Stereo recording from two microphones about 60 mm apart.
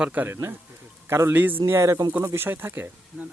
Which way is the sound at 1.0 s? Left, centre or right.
Right.